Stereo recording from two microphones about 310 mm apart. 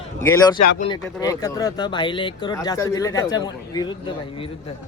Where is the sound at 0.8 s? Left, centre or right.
Centre.